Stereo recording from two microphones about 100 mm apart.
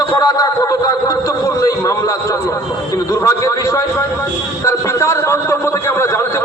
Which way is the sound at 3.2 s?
35° left (ahead or behind).